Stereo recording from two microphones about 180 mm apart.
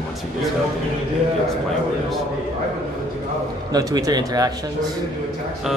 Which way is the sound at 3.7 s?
20° right (ahead or behind).